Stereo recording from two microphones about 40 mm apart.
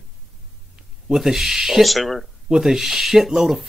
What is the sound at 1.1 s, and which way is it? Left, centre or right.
Speech, centre.